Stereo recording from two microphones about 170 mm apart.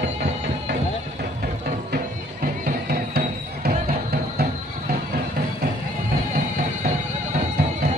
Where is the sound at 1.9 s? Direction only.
65° right (ahead or behind).